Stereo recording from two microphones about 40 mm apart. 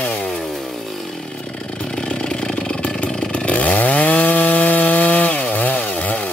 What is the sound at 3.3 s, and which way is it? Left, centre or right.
Chainsaw, left.